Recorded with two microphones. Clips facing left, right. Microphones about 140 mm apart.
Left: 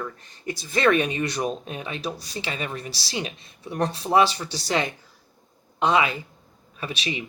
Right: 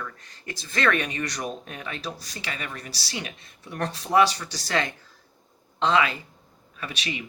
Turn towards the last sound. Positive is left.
turn(degrees=20)  # may be behind; listen again after turning